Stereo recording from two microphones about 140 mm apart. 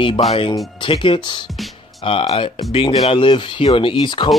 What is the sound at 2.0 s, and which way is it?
Speech, 45° left (ahead or behind).